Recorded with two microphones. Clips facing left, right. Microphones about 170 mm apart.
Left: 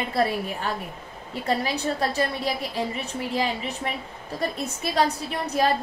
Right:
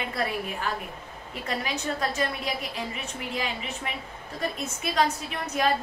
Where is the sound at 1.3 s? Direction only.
35° left (ahead or behind).